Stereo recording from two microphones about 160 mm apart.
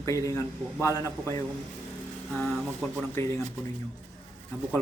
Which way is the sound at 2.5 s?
Centre (ahead or behind).